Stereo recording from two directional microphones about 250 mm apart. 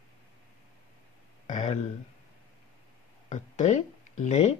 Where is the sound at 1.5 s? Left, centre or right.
Left.